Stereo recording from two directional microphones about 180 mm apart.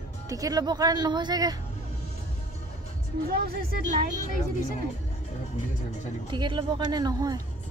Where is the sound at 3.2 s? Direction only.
55° right (ahead or behind).